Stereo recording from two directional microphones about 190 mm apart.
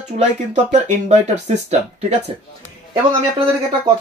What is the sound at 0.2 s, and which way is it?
Speech, 40° right (ahead or behind).